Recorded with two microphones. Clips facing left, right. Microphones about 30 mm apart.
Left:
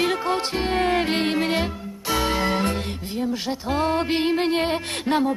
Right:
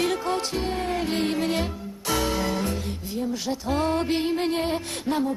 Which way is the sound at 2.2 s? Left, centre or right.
Left.